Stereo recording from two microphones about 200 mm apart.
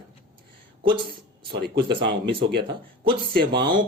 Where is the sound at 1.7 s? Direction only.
25° right (ahead or behind).